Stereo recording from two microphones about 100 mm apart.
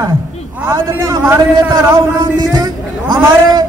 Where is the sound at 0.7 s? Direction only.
25° right (ahead or behind).